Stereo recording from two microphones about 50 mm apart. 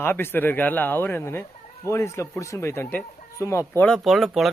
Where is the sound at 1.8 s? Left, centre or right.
Left.